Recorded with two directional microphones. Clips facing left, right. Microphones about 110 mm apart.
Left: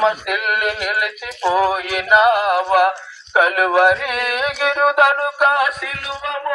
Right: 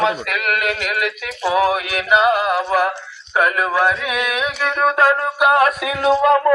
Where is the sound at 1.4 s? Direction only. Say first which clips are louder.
Left 1 dB; 10° right (ahead or behind).